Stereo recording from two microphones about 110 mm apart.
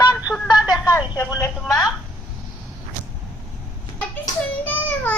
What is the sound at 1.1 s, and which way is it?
Speech, 25° left (ahead or behind).